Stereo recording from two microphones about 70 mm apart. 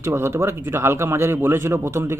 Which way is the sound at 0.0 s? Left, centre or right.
Right.